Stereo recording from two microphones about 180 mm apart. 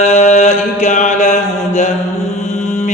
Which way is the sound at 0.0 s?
40° left (ahead or behind).